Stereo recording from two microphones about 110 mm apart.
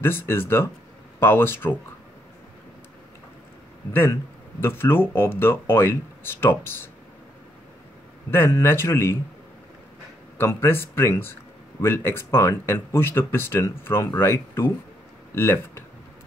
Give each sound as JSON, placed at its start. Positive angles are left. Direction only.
{"t": 0.0, "sound": "speech", "side_deg": 20}
{"t": 3.9, "sound": "speech", "side_deg": 25}
{"t": 8.3, "sound": "speech", "side_deg": 20}
{"t": 10.3, "sound": "speech", "side_deg": 20}